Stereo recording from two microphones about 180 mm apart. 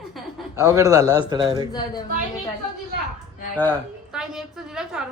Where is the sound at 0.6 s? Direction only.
20° right (ahead or behind).